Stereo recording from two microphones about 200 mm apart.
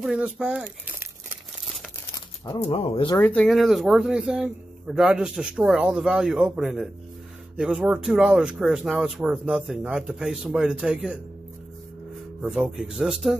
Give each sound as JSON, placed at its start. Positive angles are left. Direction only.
{"t": 0.0, "sound": "speech", "side_deg": -5}
{"t": 2.7, "sound": "speech", "side_deg": 30}
{"t": 3.2, "sound": "speech", "side_deg": 5}
{"t": 12.4, "sound": "speech", "side_deg": -5}